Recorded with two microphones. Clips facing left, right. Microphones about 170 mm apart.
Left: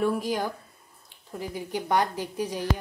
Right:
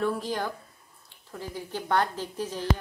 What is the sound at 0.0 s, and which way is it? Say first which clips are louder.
A woman's voice: left 2 dB; 10° left (ahead or behind).